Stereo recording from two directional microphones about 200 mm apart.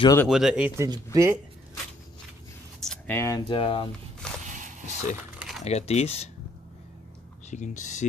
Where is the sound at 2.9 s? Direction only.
10° left (ahead or behind); by 3.9 s 25° left (ahead or behind).